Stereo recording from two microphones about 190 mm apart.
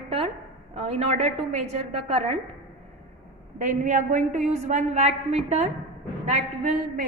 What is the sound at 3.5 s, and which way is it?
A woman's voice, 40° right (ahead or behind).